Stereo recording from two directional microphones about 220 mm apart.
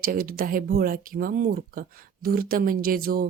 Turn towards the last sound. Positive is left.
turn(degrees=-40)  # may be behind; listen again after turning